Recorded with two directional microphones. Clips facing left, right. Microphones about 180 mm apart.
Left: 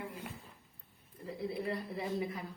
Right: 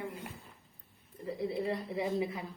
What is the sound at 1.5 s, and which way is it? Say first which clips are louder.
Speech: right 3 dB; 25° right (ahead or behind).